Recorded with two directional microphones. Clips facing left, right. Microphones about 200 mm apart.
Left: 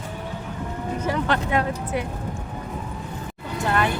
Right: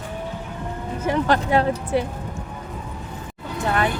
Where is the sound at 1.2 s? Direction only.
35° right (ahead or behind).